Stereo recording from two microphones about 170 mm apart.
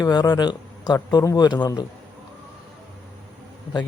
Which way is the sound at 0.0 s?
25° left (ahead or behind).